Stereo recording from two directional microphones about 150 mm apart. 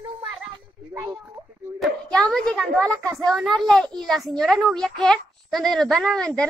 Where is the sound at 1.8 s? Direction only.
5° left (ahead or behind).